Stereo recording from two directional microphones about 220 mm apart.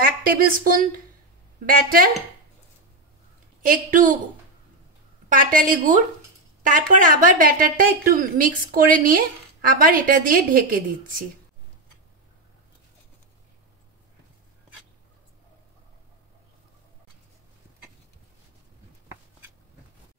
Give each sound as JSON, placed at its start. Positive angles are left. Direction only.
{"t": 0.0, "sound": "a woman's voice", "side_deg": -40}
{"t": 3.6, "sound": "a woman's voice", "side_deg": -35}
{"t": 5.3, "sound": "a woman's voice", "side_deg": -40}